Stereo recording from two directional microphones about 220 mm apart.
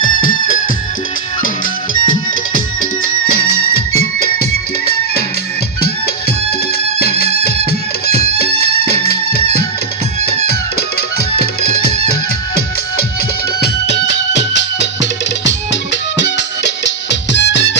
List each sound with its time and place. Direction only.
3.0 s music: 70° left (ahead or behind)
6.9 s music: 45° left (ahead or behind)
10.4 s music: 45° left (ahead or behind)
13.6 s music: 50° left (ahead or behind)